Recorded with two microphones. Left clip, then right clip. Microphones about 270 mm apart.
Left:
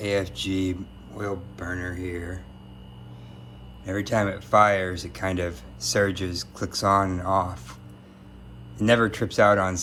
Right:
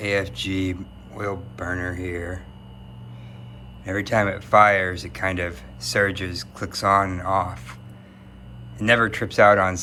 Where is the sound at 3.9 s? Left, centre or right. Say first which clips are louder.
Right 3 dB; centre.